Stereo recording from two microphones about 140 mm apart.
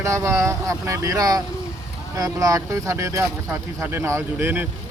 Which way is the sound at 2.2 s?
25° right (ahead or behind).